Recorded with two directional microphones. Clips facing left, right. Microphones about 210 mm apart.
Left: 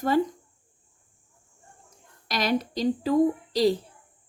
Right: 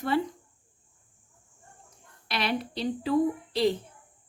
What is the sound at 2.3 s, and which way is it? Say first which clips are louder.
A woman's voice: left 4 dB; 40° left (ahead or behind).